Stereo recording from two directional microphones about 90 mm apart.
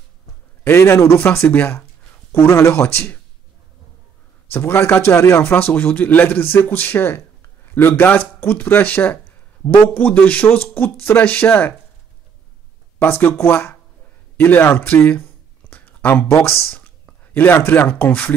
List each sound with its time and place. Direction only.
0.7 s a man's voice: 30° left (ahead or behind)
2.3 s a man's voice: 30° left (ahead or behind)
4.5 s a man's voice: 25° left (ahead or behind)
13.0 s a man's voice: 25° left (ahead or behind)
15.7 s a sound: 20° left (ahead or behind)
16.6 s speech: 20° left (ahead or behind)